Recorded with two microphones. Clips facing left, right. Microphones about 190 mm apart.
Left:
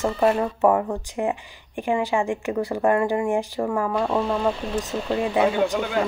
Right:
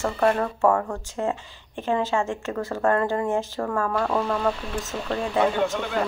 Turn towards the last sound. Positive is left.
turn(degrees=15)  # may be behind; listen again after turning